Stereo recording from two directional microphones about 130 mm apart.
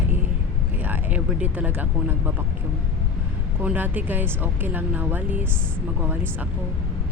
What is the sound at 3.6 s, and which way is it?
Speech, 15° right (ahead or behind).